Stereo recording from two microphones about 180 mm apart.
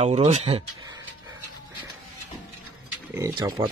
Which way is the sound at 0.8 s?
20° right (ahead or behind).